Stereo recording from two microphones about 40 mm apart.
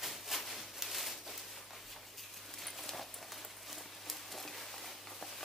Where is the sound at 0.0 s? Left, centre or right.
Centre.